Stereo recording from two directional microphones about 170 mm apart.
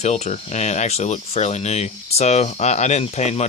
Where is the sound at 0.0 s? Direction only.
40° left (ahead or behind).